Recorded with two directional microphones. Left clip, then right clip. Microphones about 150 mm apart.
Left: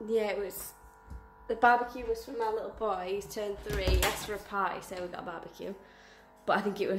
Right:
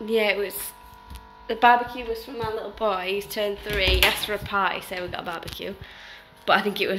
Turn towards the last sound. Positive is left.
turn(degrees=5)  # may be behind; listen again after turning